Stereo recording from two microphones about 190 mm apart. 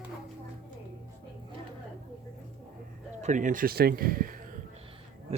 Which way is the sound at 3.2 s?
40° right (ahead or behind).